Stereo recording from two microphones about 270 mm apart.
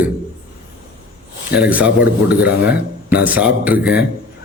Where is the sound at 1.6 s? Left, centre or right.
Centre.